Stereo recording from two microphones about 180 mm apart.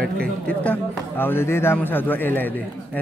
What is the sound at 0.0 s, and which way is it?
Speech, 5° left (ahead or behind).